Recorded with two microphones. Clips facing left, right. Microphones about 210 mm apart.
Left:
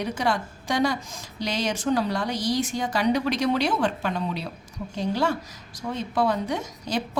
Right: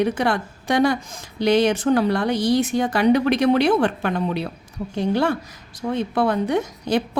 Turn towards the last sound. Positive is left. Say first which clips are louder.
# right 8 dB
turn(degrees=-60)  # may be behind; listen again after turning